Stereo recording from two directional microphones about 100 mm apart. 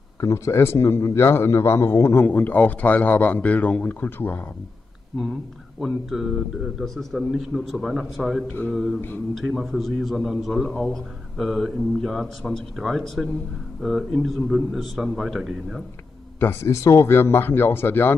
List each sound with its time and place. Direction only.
0.2 s a man's voice: 30° left (ahead or behind)
5.8 s a man's voice: centre (ahead or behind)
16.3 s a man's voice: 25° left (ahead or behind)